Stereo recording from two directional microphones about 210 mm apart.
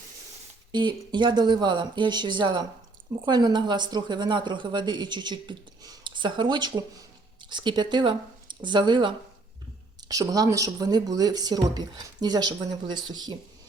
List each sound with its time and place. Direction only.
0.7 s speech: 20° right (ahead or behind)